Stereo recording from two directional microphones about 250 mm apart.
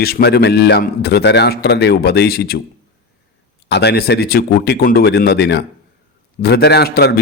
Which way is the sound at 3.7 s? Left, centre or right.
Left.